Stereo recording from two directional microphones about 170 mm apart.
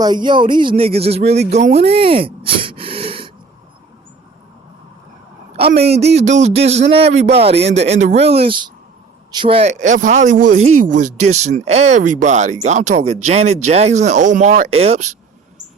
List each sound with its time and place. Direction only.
0.0 s speech: 25° right (ahead or behind)
5.5 s a man's voice: 70° right (ahead or behind)
6.1 s speech: 45° right (ahead or behind)